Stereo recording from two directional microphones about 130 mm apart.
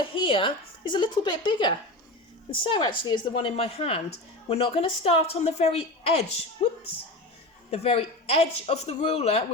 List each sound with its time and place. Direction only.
0.1 s a woman's voice: 40° left (ahead or behind)
7.7 s a woman's voice: 50° left (ahead or behind)